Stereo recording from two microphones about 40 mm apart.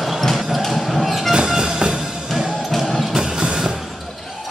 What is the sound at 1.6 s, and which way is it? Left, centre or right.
Music, centre.